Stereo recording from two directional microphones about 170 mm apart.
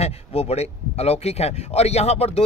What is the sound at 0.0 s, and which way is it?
Speech, 40° left (ahead or behind).